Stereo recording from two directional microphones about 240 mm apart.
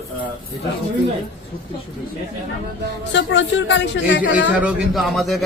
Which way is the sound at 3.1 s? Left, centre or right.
Left.